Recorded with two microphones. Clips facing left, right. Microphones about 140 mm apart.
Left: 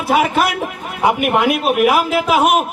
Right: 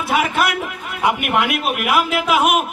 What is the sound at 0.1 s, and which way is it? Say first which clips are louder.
A man's voice: left 4 dB; 40° left (ahead or behind).